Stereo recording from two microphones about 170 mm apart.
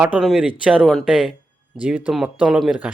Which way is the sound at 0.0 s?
5° right (ahead or behind).